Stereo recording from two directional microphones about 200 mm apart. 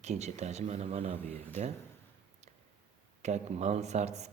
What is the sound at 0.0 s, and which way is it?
Speech, 35° right (ahead or behind).